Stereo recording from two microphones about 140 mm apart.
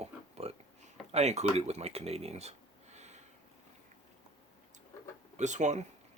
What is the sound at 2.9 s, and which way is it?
Sniff, 55° right (ahead or behind).